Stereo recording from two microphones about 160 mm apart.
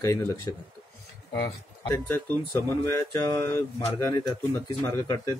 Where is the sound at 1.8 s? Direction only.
15° left (ahead or behind).